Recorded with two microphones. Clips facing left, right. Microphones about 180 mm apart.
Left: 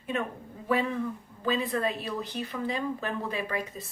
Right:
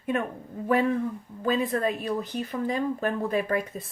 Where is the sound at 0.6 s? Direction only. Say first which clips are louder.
Right 4 dB; 50° right (ahead or behind).